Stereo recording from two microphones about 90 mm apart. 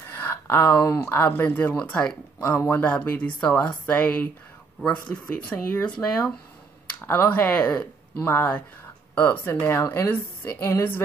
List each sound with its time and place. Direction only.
0.1 s a sound: 25° left (ahead or behind)
1.0 s a woman's voice: 25° left (ahead or behind)
2.6 s a woman's voice: 25° left (ahead or behind); by 6.3 s 10° left (ahead or behind)
7.0 s a woman's voice: 25° left (ahead or behind)